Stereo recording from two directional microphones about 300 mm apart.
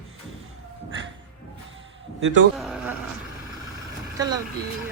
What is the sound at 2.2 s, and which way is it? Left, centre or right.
Speech, right.